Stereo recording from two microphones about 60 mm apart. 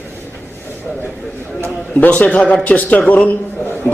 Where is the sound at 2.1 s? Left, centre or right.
Centre.